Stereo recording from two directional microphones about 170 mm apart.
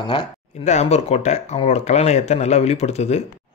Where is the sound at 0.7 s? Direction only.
40° left (ahead or behind).